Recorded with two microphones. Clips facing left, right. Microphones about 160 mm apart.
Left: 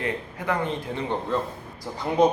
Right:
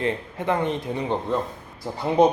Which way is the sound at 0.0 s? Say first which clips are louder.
Right 3 dB; 25° right (ahead or behind).